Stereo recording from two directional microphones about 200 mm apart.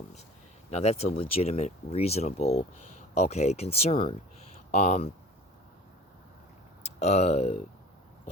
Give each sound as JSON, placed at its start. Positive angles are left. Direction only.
{"t": 0.7, "sound": "speech", "side_deg": 35}
{"t": 6.8, "sound": "speech", "side_deg": 30}